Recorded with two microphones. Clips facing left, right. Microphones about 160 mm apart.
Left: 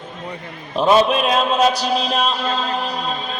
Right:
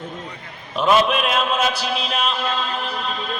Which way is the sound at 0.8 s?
35° left (ahead or behind).